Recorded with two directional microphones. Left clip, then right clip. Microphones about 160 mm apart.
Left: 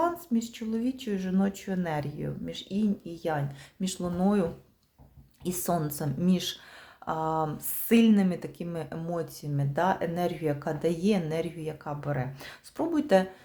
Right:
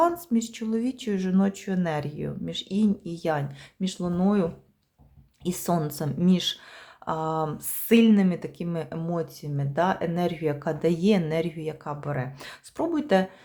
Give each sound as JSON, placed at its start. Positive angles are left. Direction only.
{"t": 0.0, "sound": "speech", "side_deg": -30}
{"t": 3.8, "sound": "speech", "side_deg": -10}